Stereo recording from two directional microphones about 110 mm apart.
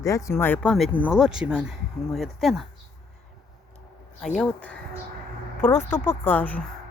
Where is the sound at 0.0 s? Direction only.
30° left (ahead or behind); by 0.9 s 10° left (ahead or behind).